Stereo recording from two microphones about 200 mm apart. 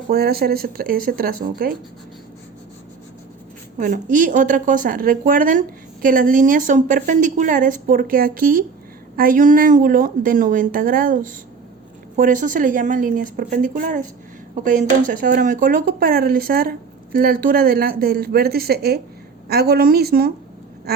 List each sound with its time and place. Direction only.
0.1 s a woman's voice: 50° right (ahead or behind)
3.8 s a woman's voice: 40° right (ahead or behind)